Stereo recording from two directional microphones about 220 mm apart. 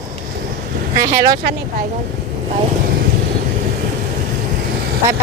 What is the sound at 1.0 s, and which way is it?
Speech, 15° right (ahead or behind).